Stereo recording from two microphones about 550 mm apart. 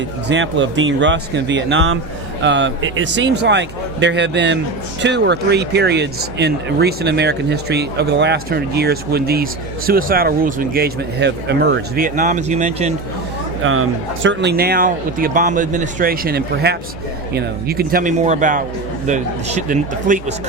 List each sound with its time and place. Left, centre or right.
0.3 s speech: centre